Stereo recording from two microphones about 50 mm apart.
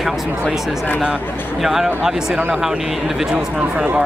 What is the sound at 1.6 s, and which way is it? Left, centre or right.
Speech, centre.